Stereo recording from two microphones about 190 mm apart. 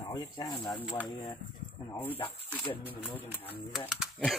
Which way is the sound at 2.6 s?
30° left (ahead or behind).